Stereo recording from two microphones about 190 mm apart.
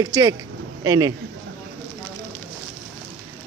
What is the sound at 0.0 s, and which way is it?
A man's voice, 20° right (ahead or behind).